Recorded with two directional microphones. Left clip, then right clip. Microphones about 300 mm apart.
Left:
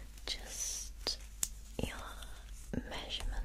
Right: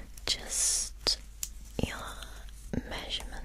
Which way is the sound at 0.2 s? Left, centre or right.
Right.